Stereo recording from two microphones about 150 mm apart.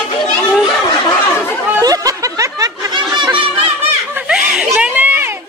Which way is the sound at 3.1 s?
30° right (ahead or behind).